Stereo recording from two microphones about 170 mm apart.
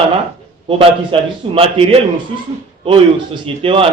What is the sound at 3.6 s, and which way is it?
Speech, 35° right (ahead or behind).